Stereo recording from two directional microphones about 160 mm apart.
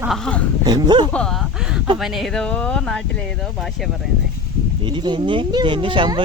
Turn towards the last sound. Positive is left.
turn(degrees=-30)  # may be behind; listen again after turning